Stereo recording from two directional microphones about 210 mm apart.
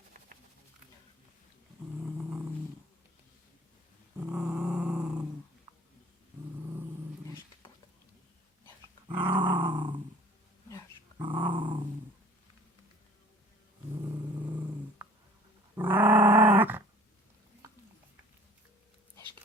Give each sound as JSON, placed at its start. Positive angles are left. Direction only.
{"t": 2.0, "sound": "vehicle", "side_deg": -10}
{"t": 4.3, "sound": "a sound", "side_deg": -5}
{"t": 8.6, "sound": "dog", "side_deg": -20}
{"t": 9.3, "sound": "growling", "side_deg": -20}
{"t": 11.2, "sound": "dog", "side_deg": -20}
{"t": 14.0, "sound": "vehicle", "side_deg": -10}
{"t": 15.7, "sound": "dog", "side_deg": -10}